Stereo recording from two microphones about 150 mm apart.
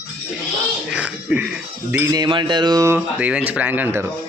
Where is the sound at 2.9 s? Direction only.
10° right (ahead or behind).